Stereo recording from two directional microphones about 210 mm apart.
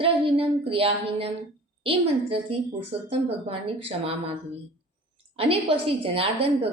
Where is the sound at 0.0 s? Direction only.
25° right (ahead or behind).